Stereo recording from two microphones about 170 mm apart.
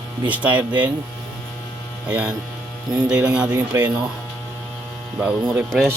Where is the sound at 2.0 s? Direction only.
10° right (ahead or behind).